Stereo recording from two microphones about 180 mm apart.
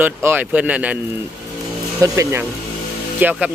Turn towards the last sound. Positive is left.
turn(degrees=-5)  # may be behind; listen again after turning